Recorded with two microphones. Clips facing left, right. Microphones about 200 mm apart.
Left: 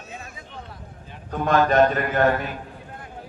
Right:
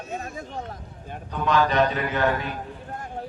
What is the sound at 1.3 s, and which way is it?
A man's voice, 50° left (ahead or behind).